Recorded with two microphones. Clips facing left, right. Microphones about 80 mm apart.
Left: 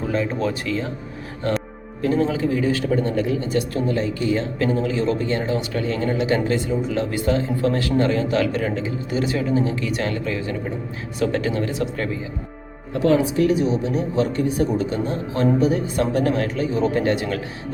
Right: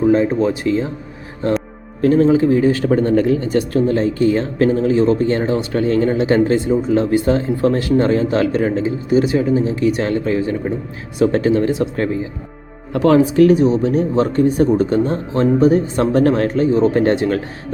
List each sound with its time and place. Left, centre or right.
0.1 s speech: right
2.0 s a man's voice: right
12.9 s a man's voice: right